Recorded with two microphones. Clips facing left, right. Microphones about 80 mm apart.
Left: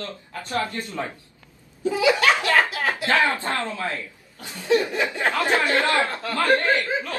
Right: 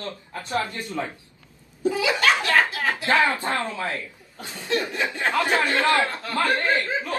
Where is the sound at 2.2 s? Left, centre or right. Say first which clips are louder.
Left 1 dB; centre.